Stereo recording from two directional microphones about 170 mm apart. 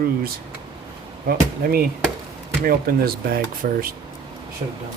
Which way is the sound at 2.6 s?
60° right (ahead or behind).